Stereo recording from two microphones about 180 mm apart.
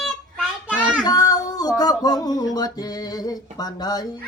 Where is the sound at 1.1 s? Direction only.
20° left (ahead or behind).